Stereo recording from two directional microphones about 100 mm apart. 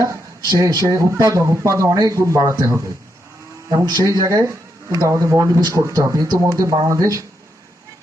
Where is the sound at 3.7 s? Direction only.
45° right (ahead or behind).